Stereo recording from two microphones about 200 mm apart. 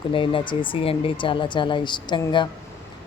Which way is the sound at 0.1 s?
25° left (ahead or behind).